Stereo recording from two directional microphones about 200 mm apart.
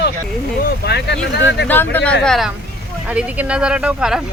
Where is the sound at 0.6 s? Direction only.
55° left (ahead or behind).